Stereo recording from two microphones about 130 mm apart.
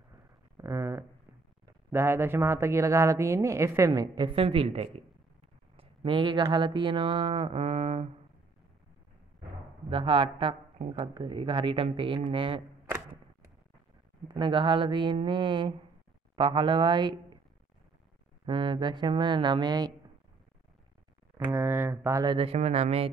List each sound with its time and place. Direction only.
0.6 s a sound: 25° right (ahead or behind)
1.9 s speech: 20° right (ahead or behind); by 5.0 s 50° right (ahead or behind)
5.8 s speech: 40° right (ahead or behind)
9.8 s speech: 40° right (ahead or behind)
14.2 s speech: 35° right (ahead or behind)
18.4 s speech: 35° right (ahead or behind)
21.5 s speech: 15° right (ahead or behind)
22.2 s speech: 35° right (ahead or behind)
22.5 s speech: 50° right (ahead or behind)